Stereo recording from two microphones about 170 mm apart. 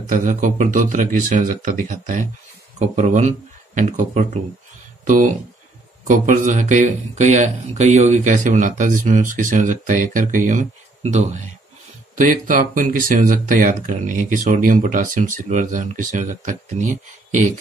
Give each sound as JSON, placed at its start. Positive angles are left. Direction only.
{"t": 0.0, "sound": "speech", "side_deg": -50}
{"t": 12.2, "sound": "speech", "side_deg": -50}